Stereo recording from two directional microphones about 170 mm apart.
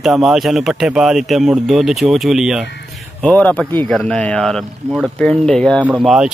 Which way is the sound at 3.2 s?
10° left (ahead or behind).